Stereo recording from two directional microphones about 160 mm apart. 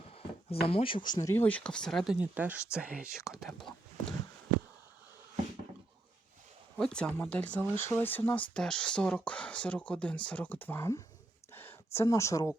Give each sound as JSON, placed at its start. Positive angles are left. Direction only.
{"t": 0.1, "sound": "speech", "side_deg": 35}
{"t": 2.3, "sound": "speech", "side_deg": -10}
{"t": 6.7, "sound": "speech", "side_deg": 5}
{"t": 11.5, "sound": "a sound", "side_deg": 15}